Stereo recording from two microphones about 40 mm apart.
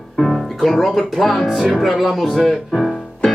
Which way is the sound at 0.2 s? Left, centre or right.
Centre.